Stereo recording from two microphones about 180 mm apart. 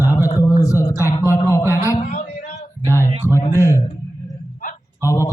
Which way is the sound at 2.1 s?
40° left (ahead or behind).